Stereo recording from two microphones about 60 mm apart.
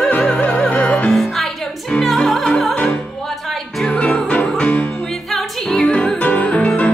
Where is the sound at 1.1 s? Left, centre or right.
Centre.